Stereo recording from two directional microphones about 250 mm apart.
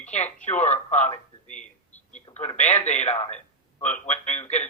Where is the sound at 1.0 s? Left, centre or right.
Left.